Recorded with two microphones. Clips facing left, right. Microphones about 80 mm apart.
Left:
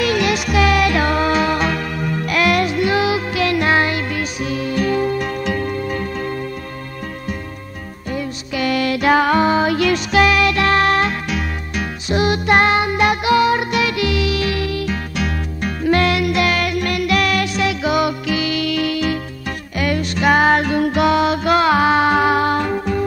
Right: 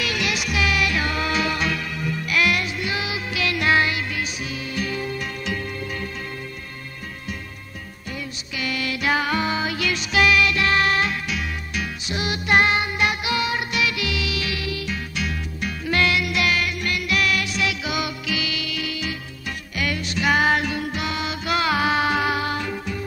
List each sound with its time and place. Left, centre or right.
0.0 s music: left
1.2 s music: left
8.5 s music: left
16.3 s music: left
18.7 s music: left
19.8 s music: left